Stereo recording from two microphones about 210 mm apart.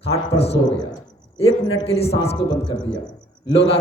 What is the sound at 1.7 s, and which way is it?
Speech, 30° left (ahead or behind).